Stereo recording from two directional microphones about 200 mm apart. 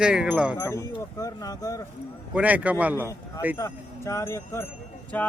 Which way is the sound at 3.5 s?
15° left (ahead or behind).